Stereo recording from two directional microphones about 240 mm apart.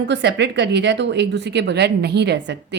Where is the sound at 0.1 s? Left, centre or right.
Right.